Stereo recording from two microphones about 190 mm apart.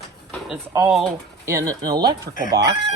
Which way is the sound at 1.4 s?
15° right (ahead or behind).